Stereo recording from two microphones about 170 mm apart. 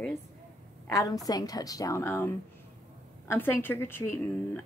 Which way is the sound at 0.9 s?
20° left (ahead or behind).